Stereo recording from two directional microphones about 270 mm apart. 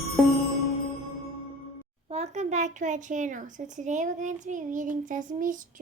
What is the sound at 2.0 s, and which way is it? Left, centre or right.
Speech, right.